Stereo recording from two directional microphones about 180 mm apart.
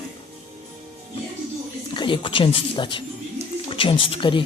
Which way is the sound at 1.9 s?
25° left (ahead or behind).